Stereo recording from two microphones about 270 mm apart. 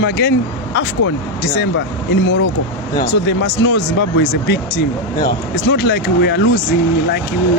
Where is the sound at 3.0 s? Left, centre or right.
Left.